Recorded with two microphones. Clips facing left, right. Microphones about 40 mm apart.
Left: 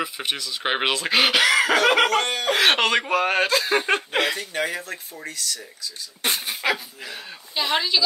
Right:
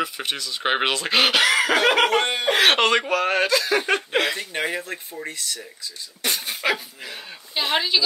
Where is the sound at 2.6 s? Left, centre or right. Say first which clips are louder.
Right 1 dB; centre.